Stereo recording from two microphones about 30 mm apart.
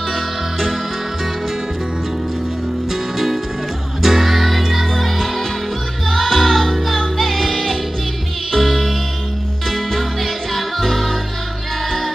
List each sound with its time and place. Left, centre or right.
0.1 s music: centre
2.9 s music: centre